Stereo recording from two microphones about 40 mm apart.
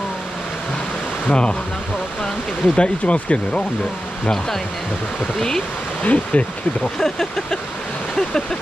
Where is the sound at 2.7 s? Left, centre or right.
Left.